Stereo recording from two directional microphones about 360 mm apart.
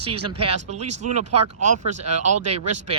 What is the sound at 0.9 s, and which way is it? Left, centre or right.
Speech, right.